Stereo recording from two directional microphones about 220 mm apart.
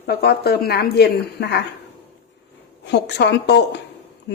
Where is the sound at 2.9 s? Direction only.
50° left (ahead or behind).